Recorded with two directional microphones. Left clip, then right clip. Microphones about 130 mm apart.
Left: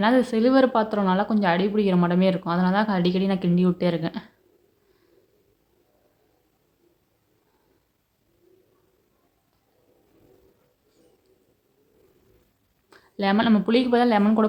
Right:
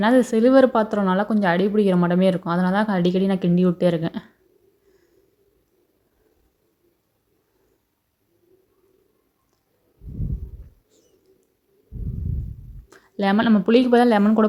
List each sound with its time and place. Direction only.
0.0 s speech: 45° right (ahead or behind)
12.9 s a woman's voice: 40° right (ahead or behind)